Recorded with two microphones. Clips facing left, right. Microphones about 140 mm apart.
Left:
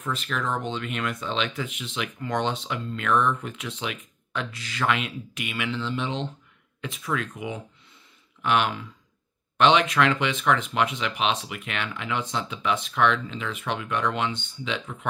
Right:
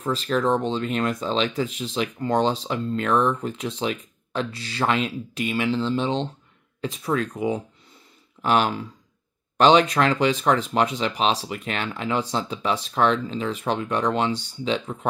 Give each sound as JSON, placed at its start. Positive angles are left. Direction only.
{"t": 0.0, "sound": "speech", "side_deg": -35}